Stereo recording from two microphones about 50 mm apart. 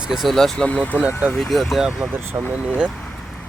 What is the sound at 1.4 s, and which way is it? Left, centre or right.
Speech, centre.